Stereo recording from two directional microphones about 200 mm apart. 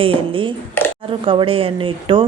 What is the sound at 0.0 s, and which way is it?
A child's voice, 25° right (ahead or behind).